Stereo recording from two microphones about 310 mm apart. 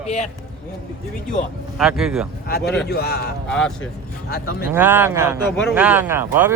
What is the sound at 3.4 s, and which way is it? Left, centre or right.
Speech, centre.